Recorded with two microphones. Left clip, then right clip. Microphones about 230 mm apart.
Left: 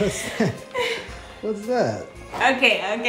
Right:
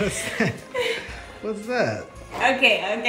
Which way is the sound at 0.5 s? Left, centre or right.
Centre.